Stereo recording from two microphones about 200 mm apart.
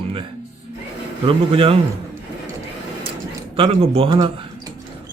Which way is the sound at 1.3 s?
30° right (ahead or behind).